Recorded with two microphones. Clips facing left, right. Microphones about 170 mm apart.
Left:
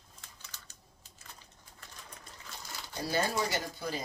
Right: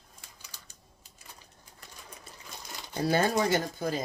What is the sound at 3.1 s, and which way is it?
Speech, 55° right (ahead or behind).